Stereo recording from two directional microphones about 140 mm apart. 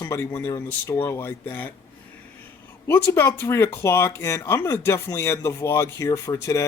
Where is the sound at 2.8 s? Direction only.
20° left (ahead or behind).